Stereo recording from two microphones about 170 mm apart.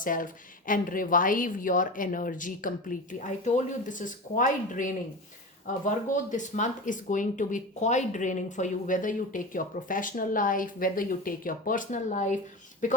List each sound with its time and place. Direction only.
0.0 s speech: 55° left (ahead or behind)
6.3 s speech: 45° left (ahead or behind)